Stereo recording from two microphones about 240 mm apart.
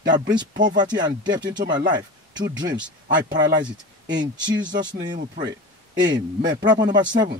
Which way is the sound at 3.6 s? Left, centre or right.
Right.